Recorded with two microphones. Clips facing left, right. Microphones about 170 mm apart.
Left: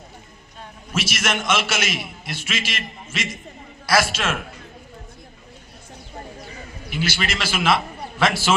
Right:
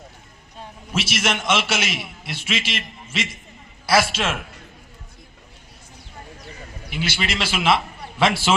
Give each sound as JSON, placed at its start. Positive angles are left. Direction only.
{"t": 0.9, "sound": "a man's voice", "side_deg": -30}
{"t": 3.8, "sound": "a man's voice", "side_deg": -25}
{"t": 6.9, "sound": "a man's voice", "side_deg": -25}